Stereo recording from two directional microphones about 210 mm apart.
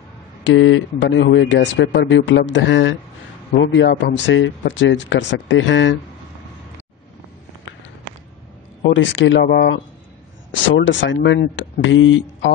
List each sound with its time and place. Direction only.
0.4 s speech: 65° left (ahead or behind)
8.8 s speech: 60° left (ahead or behind)